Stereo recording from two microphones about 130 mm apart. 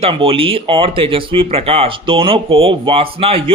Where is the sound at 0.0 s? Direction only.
45° right (ahead or behind).